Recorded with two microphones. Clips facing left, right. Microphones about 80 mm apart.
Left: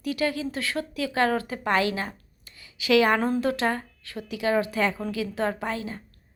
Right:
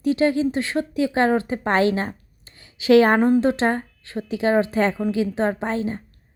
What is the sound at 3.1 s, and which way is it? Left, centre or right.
A woman's voice, centre.